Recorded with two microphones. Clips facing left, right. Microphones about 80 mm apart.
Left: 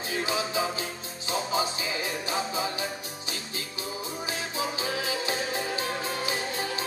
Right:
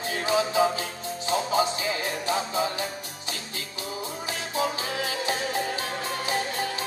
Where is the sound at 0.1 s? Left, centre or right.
Right.